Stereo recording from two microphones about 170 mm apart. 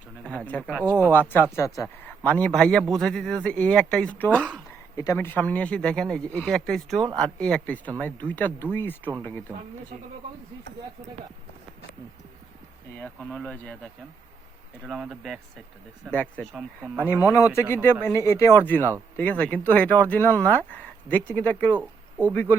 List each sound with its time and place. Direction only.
0.3 s speech: 10° left (ahead or behind)
0.9 s speech: 20° right (ahead or behind)
1.1 s a man's voice: 10° left (ahead or behind)
13.0 s speech: 10° left (ahead or behind)
14.8 s a man's voice: 5° right (ahead or behind)
16.0 s speech: 10° left (ahead or behind)